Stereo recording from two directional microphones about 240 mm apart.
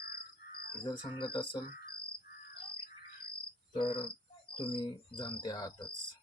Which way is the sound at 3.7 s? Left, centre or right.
Left.